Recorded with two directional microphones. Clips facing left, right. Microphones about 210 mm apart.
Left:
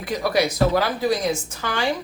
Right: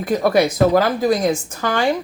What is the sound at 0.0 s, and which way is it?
A woman's voice, 50° right (ahead or behind).